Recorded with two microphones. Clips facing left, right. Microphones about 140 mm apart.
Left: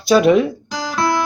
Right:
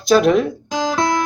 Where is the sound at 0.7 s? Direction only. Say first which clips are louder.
Right 4 dB; 20° right (ahead or behind).